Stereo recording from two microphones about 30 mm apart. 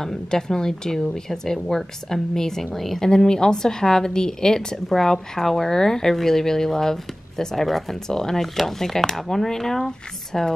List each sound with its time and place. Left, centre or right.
0.3 s speech: left
3.0 s a woman's voice: left
4.8 s speech: centre
8.1 s speech: centre